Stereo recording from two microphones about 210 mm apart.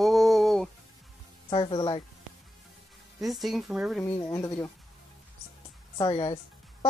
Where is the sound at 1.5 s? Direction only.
25° left (ahead or behind).